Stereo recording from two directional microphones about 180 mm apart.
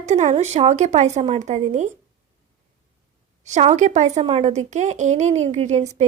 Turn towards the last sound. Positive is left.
turn(degrees=-35)  # may be behind; listen again after turning